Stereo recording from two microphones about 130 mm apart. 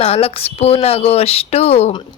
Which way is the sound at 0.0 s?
50° left (ahead or behind).